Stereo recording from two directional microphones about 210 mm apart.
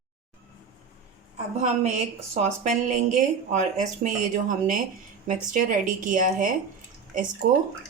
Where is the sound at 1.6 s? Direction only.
35° right (ahead or behind).